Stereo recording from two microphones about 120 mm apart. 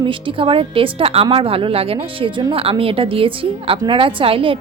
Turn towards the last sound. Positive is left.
turn(degrees=-50)  # may be behind; listen again after turning